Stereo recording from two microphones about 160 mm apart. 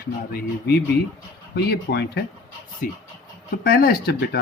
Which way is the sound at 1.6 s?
90° left.